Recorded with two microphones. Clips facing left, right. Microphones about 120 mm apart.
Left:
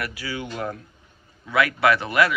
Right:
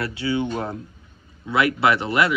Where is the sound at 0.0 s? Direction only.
25° right (ahead or behind).